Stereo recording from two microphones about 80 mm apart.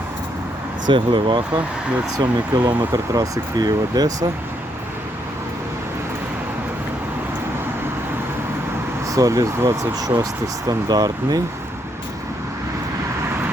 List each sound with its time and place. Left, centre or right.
0.9 s speech: right
2.1 s speech: right
9.0 s speech: right
10.7 s speech: right